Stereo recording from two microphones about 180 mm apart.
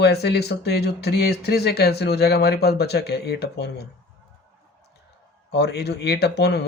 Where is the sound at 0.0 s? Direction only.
65° left (ahead or behind).